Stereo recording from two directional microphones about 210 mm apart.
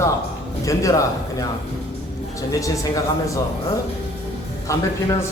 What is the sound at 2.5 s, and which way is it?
Speech, 15° left (ahead or behind).